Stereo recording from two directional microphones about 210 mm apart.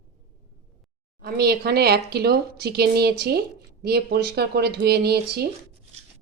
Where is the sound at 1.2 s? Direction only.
50° right (ahead or behind).